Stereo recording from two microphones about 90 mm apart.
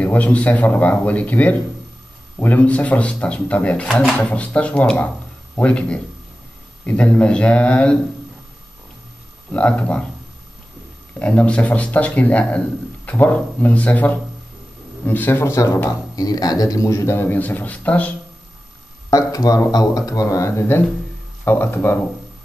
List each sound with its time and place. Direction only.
0.0 s a man's voice: 15° left (ahead or behind)
3.9 s speech: centre (ahead or behind)
4.3 s a man's voice: 15° left (ahead or behind)
9.5 s a man's voice: 15° left (ahead or behind)
11.1 s a man's voice: 15° left (ahead or behind)
15.5 s a man's voice: 40° left (ahead or behind); by 18.1 s 15° left (ahead or behind)
19.0 s a man's voice: 40° left (ahead or behind); by 22.0 s 25° left (ahead or behind)